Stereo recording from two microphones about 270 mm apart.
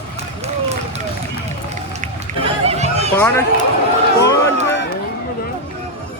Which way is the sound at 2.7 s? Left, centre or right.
Right.